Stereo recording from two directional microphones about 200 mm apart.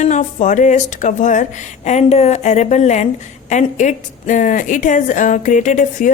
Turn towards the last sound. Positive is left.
turn(degrees=40)  # may be behind; listen again after turning